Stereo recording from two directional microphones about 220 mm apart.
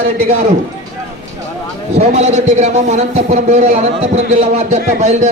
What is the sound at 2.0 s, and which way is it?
A man's voice, 30° right (ahead or behind).